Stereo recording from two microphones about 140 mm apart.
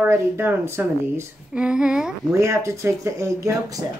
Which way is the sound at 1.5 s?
5° right (ahead or behind).